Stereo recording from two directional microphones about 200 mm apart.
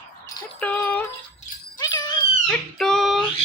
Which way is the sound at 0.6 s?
10° left (ahead or behind).